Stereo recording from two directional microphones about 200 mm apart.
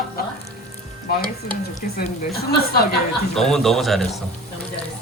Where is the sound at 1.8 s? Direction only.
45° left (ahead or behind).